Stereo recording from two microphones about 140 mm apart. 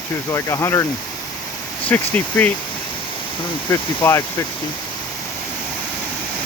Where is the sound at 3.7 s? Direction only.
20° left (ahead or behind).